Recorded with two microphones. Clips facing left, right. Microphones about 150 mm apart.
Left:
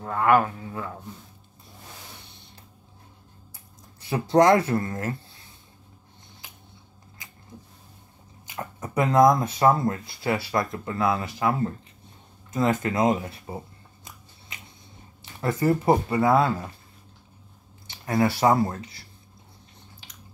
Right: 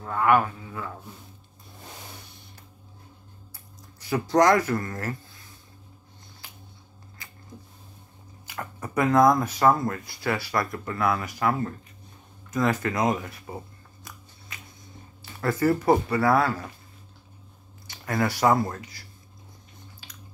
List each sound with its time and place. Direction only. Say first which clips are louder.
0.0 s didgeridoo: left 1 dB; 30° left (ahead or behind)
4.0 s speech: left 2 dB; 25° left (ahead or behind)
8.5 s speech: left 1 dB; 20° left (ahead or behind)
14.5 s a sound: even; 20° left (ahead or behind)
15.4 s speech: even; 20° left (ahead or behind)
17.8 s speech: left 3 dB; 25° left (ahead or behind)